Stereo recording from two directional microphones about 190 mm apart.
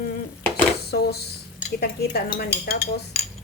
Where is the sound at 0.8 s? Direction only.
55° left (ahead or behind).